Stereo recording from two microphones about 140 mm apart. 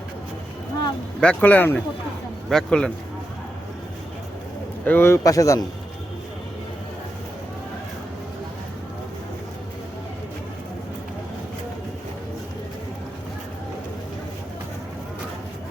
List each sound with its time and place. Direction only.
1.2 s speech: 10° left (ahead or behind)
4.9 s a man's voice: 15° left (ahead or behind)